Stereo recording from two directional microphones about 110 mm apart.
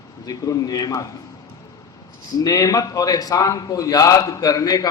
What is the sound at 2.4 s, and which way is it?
A man's voice, 35° left (ahead or behind).